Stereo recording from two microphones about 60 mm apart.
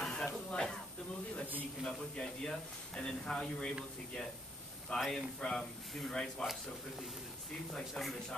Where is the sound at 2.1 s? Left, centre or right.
Centre.